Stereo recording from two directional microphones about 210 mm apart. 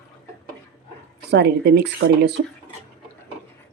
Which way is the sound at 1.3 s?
50° right (ahead or behind).